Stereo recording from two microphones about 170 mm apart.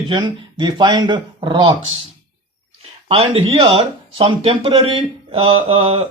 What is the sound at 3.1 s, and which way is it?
Speech, 35° right (ahead or behind).